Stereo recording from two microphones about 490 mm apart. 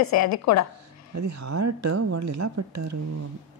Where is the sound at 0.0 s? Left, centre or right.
Left.